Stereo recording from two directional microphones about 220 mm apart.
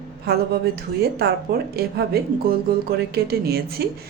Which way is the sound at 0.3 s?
45° right (ahead or behind).